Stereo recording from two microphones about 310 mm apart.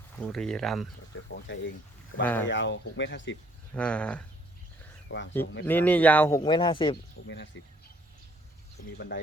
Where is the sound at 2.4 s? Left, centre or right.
Left.